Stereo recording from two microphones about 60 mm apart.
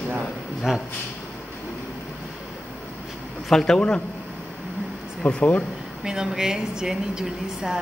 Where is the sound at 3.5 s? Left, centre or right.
Centre.